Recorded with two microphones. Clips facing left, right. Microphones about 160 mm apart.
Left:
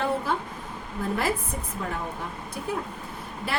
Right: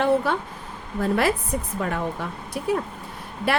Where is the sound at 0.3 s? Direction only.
75° right (ahead or behind).